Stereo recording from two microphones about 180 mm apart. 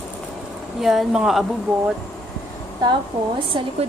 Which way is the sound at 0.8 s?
Centre (ahead or behind).